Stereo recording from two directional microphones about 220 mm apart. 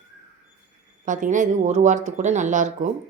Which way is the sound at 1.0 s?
35° right (ahead or behind).